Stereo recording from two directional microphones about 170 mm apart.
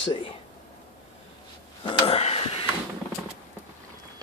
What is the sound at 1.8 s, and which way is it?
Sniff, 35° left (ahead or behind).